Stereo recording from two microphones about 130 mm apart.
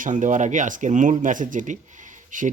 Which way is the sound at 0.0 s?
75° right (ahead or behind).